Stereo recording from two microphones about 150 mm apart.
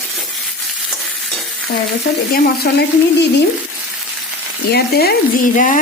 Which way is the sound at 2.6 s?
90° left.